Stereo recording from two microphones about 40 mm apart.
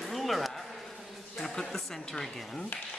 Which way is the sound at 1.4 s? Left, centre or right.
Centre.